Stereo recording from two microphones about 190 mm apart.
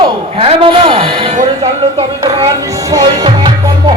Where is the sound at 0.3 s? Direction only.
30° right (ahead or behind).